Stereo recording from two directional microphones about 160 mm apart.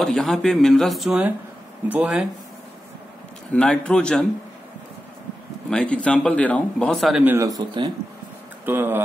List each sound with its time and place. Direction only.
0.0 s speech: centre (ahead or behind)
3.5 s speech: 5° left (ahead or behind)
5.7 s speech: 5° left (ahead or behind)
7.2 s speech: 20° right (ahead or behind)
8.6 s speech: 10° right (ahead or behind)